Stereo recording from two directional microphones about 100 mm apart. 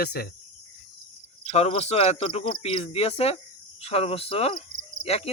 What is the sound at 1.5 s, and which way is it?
Speech, 90° left.